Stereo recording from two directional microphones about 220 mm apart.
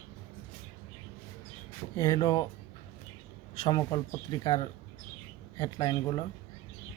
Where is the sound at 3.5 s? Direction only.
20° left (ahead or behind).